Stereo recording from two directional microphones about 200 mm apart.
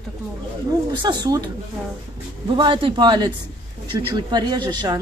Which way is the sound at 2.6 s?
25° right (ahead or behind).